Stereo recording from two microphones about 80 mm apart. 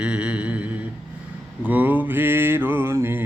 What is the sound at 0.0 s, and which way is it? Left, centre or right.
Mantra, centre.